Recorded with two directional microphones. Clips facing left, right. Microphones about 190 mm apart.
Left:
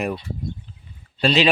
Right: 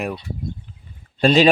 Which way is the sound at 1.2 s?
45° right (ahead or behind).